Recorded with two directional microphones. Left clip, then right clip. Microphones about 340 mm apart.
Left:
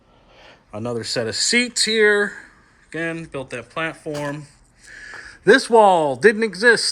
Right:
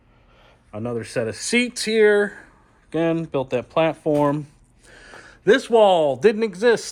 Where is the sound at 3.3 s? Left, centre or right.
Centre.